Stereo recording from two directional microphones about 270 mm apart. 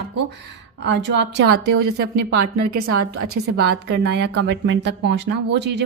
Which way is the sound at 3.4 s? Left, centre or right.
Right.